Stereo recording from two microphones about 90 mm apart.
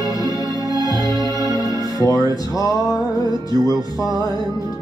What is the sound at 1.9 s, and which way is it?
Music, 45° left (ahead or behind).